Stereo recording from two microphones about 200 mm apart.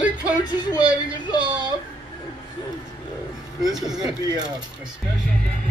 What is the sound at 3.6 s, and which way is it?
Speech, centre (ahead or behind).